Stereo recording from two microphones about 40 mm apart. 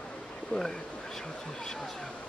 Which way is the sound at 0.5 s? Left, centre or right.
Left.